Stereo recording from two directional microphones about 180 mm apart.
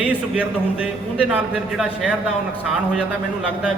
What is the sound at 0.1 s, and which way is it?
Speech, 5° right (ahead or behind).